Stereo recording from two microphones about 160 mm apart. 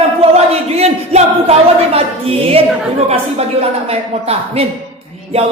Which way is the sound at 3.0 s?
40° right (ahead or behind).